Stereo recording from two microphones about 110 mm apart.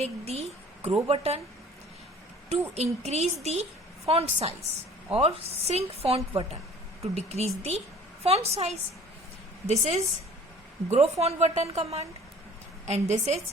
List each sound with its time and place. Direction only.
0.0 s a woman's voice: 70° right (ahead or behind)
2.7 s a woman's voice: 80° right
12.8 s a woman's voice: 90° right